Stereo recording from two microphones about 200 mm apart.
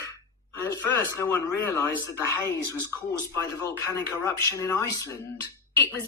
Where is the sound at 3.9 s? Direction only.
15° left (ahead or behind).